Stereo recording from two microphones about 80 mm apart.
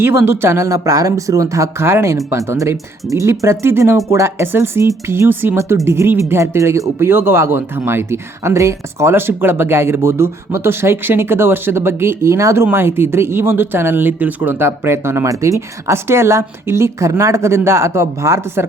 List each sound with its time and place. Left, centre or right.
0.0 s speech: right